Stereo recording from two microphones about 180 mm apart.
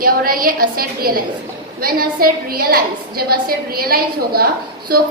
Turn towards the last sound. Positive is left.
turn(degrees=-55)  # may be behind; listen again after turning